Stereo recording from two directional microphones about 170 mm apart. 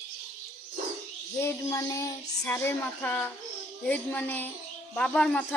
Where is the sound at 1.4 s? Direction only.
15° left (ahead or behind).